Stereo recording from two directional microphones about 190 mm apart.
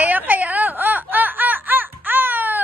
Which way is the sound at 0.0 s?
10° right (ahead or behind).